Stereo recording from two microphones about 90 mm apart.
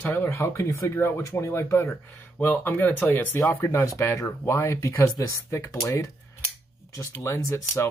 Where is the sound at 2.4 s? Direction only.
20° left (ahead or behind).